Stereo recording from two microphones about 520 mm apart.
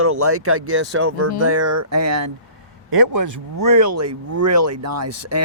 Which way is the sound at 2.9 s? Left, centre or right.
Right.